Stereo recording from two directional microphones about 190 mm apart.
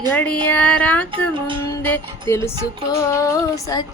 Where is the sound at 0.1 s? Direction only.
10° left (ahead or behind).